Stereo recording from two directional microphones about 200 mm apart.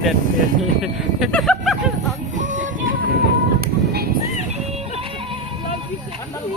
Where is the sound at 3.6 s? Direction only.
50° right (ahead or behind).